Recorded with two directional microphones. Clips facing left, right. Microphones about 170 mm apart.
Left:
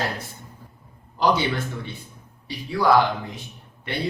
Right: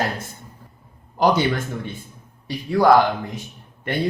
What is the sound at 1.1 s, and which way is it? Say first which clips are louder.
Speech: right 3 dB; 45° right (ahead or behind).